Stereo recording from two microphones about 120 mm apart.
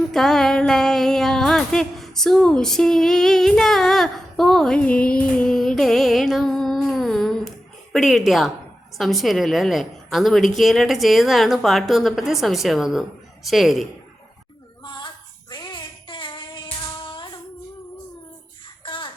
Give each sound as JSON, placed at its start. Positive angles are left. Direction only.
{"t": 0.1, "sound": "music", "side_deg": 5}
{"t": 7.9, "sound": "a woman's voice", "side_deg": 0}
{"t": 14.8, "sound": "child singing", "side_deg": 40}
{"t": 17.0, "sound": "a sound", "side_deg": 40}
{"t": 18.9, "sound": "music", "side_deg": 45}